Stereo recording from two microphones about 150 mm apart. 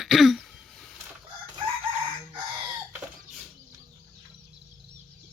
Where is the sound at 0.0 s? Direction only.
Centre (ahead or behind).